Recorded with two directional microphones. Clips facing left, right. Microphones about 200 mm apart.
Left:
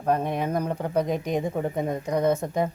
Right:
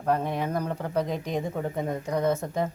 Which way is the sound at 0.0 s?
20° left (ahead or behind).